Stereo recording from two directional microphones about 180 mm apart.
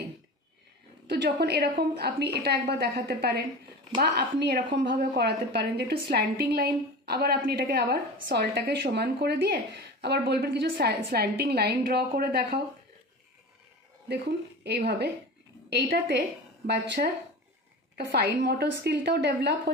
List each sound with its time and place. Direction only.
1.0 s a woman's voice: 65° right (ahead or behind)
14.6 s a woman's voice: 60° right (ahead or behind)